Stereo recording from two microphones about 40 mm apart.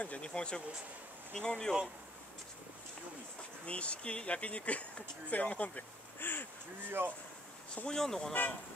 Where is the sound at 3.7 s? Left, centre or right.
Left.